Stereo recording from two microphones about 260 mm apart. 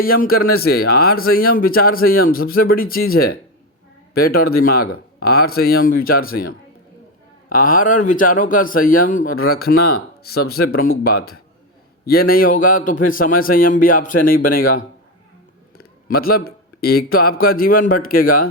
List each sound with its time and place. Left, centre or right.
0.0 s a man's voice: left
7.5 s a man's voice: left
12.0 s a man's voice: left
16.0 s a man's voice: left